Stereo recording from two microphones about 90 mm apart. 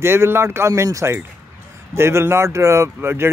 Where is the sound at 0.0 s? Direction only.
25° right (ahead or behind).